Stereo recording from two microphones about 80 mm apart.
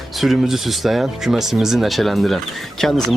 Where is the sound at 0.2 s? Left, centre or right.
Centre.